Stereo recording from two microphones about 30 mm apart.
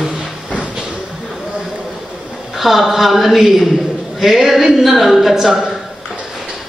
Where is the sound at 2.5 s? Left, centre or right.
Centre.